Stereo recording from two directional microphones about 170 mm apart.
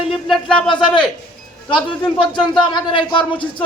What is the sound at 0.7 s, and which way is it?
A man's voice, 25° left (ahead or behind).